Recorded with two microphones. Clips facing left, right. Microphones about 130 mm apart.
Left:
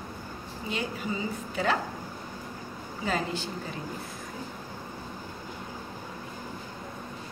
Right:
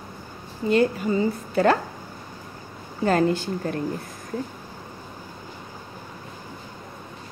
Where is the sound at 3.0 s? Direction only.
55° right (ahead or behind).